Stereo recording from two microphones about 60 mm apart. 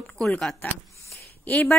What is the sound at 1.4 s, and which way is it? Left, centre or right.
Speech, left.